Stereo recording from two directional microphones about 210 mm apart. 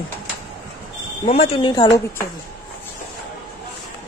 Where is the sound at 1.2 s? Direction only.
30° left (ahead or behind).